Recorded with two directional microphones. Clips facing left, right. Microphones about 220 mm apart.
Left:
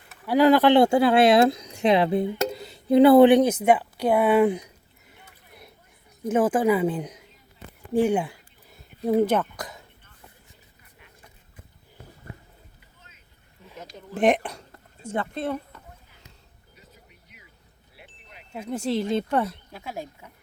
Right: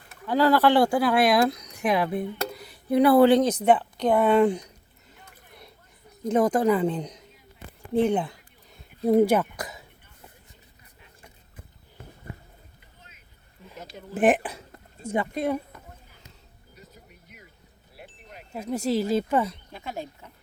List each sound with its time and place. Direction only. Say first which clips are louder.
0.1 s speech: left 3 dB; 15° left (ahead or behind)
7.9 s a sound: left 1 dB; 10° left (ahead or behind)
9.0 s speech: right 2 dB; centre (ahead or behind)
13.7 s speech: even; centre (ahead or behind)
16.7 s a sound: right 4 dB; 45° right (ahead or behind)
18.5 s speech: right 1 dB; 5° right (ahead or behind); by 20.3 s 10° left (ahead or behind)